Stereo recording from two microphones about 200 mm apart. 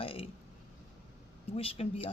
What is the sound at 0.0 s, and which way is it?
Burping, 25° left (ahead or behind).